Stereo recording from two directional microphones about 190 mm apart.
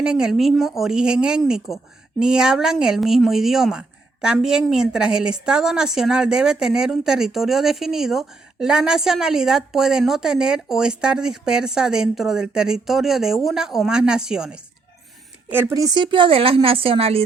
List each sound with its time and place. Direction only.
0.0 s a woman's voice: 5° right (ahead or behind); by 17.2 s 30° right (ahead or behind)